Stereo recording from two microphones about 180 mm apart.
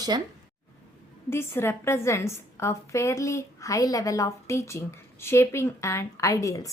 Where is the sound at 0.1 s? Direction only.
25° right (ahead or behind).